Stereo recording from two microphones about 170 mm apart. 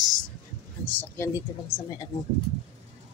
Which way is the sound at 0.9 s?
10° left (ahead or behind).